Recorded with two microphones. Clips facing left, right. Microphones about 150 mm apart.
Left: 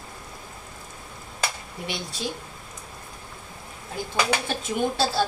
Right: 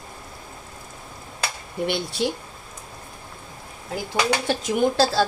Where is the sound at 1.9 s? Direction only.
65° right (ahead or behind).